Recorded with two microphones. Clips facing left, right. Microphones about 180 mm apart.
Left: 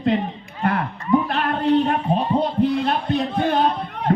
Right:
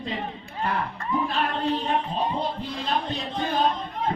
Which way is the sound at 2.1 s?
65° left (ahead or behind).